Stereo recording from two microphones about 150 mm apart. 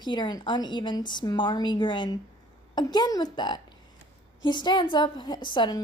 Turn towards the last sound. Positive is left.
turn(degrees=30)  # may be behind; listen again after turning